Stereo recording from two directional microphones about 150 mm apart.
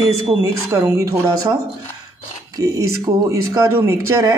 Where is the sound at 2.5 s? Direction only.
20° right (ahead or behind).